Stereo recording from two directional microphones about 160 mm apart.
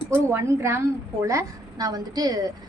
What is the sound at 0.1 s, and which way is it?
A woman's voice, 15° right (ahead or behind).